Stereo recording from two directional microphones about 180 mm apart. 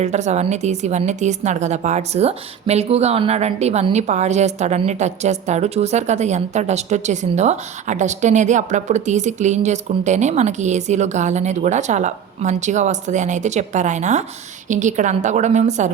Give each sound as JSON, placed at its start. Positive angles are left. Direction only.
{"t": 0.0, "sound": "a woman's voice", "side_deg": -40}